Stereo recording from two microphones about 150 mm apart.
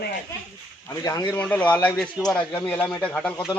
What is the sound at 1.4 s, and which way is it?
A man's voice, 10° left (ahead or behind).